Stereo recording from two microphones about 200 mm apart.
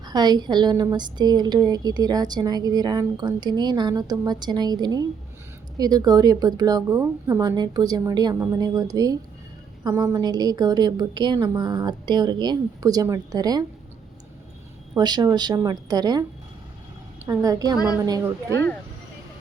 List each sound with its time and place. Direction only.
0.0 s a woman's voice: 20° right (ahead or behind)
14.9 s a woman's voice: 20° right (ahead or behind)
17.2 s a woman's voice: 15° right (ahead or behind)